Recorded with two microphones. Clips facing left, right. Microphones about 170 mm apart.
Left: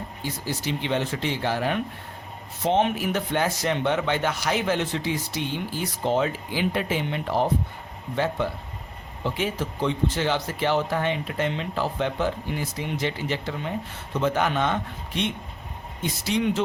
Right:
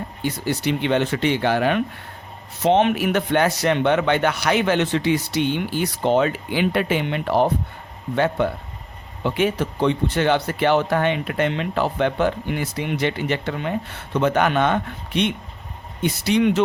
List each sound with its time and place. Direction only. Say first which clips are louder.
0.2 s speech: right 7 dB; 70° right (ahead or behind)